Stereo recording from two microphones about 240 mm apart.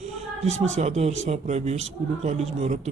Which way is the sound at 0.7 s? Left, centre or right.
Right.